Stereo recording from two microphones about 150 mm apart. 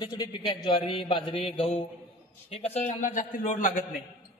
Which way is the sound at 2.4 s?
45° left (ahead or behind).